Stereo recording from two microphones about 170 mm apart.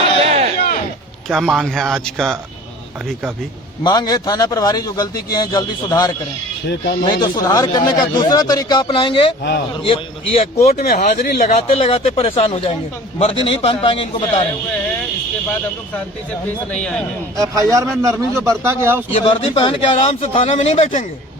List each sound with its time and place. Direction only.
0.2 s a sound: 40° right (ahead or behind)
1.3 s speech: centre (ahead or behind)
3.8 s speech: 25° left (ahead or behind)
6.7 s speech: 80° left
7.0 s speech: 25° left (ahead or behind)
10.7 s speech: 65° left (ahead or behind)
10.9 s speech: 45° left (ahead or behind); by 14.4 s 30° left (ahead or behind)
16.7 s speech: 5° left (ahead or behind)
17.3 s a man's voice: 20° right (ahead or behind)
19.1 s speech: 35° left (ahead or behind)